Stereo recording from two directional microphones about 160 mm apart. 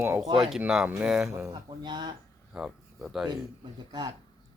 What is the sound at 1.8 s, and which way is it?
Speech, 25° right (ahead or behind).